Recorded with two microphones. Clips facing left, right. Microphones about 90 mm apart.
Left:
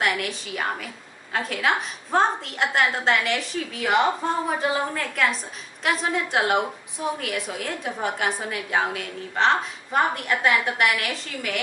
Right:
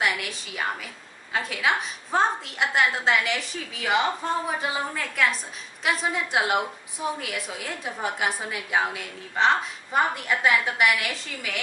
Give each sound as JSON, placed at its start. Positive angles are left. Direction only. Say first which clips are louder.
{"t": 0.0, "sound": "a woman's voice", "louder": "left 2 dB", "side_deg": 0}